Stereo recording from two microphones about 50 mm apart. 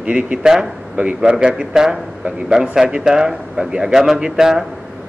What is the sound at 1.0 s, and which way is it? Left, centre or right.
Speech, right.